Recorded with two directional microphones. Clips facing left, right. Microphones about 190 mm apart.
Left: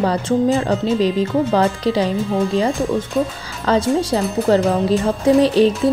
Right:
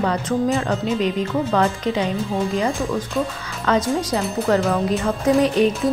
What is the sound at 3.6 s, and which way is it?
A woman's voice, 30° left (ahead or behind).